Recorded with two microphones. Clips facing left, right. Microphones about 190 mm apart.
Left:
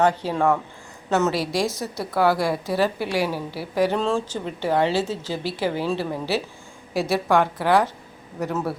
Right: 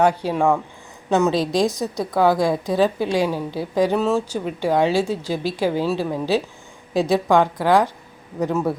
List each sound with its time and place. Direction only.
0.0 s a woman's voice: 10° right (ahead or behind)